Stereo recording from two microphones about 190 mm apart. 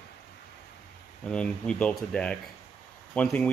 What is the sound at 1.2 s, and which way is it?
Speech, 5° left (ahead or behind).